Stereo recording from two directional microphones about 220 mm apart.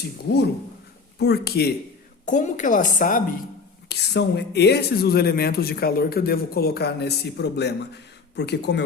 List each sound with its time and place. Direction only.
1.2 s speech: 45° left (ahead or behind)
2.2 s a woman's voice: 35° left (ahead or behind)
3.8 s speech: 50° left (ahead or behind)